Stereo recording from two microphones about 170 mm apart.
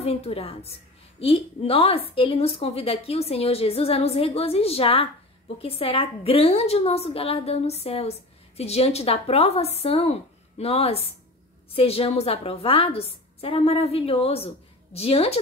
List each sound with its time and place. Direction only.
0.0 s a woman's voice: 35° left (ahead or behind)